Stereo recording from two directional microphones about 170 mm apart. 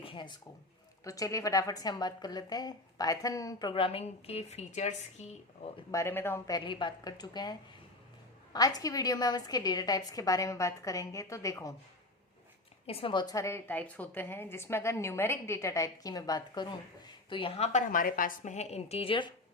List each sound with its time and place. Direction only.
0.0 s a sound: 30° left (ahead or behind)
1.0 s a woman's voice: 20° left (ahead or behind); by 5.8 s 40° left (ahead or behind)
5.9 s a woman's voice: 15° left (ahead or behind)
6.7 s a woman's voice: 25° left (ahead or behind)
8.5 s a woman's voice: 20° left (ahead or behind)
12.8 s a woman's voice: 35° left (ahead or behind)